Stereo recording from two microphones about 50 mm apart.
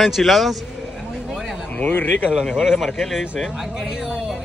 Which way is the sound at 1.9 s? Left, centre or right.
Left.